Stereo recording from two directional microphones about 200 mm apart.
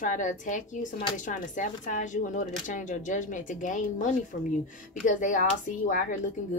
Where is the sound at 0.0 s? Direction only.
40° left (ahead or behind).